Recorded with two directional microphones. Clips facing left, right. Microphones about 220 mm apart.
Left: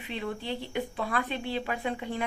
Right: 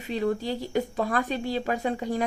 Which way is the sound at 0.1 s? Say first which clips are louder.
Right 7 dB; 40° right (ahead or behind).